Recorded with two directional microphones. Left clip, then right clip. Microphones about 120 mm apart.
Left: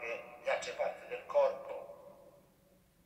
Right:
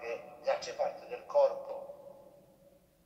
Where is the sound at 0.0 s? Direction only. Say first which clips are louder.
Right 3 dB; 25° left (ahead or behind).